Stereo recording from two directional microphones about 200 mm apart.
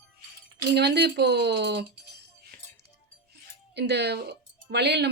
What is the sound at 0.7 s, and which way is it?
Speech, 55° right (ahead or behind).